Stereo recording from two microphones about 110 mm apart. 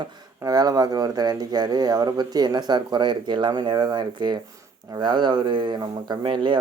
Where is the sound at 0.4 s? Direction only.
35° right (ahead or behind).